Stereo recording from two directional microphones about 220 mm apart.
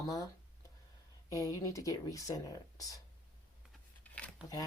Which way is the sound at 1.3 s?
15° left (ahead or behind).